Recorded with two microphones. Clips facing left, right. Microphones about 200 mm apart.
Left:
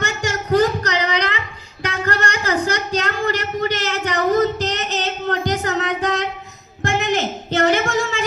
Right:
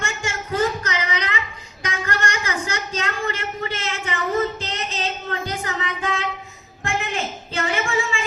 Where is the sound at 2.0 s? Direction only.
35° left (ahead or behind).